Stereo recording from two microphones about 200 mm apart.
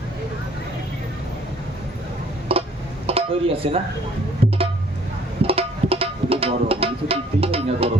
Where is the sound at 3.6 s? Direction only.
30° right (ahead or behind).